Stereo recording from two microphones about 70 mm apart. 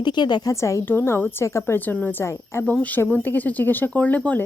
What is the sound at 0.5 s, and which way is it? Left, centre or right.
Speech, left.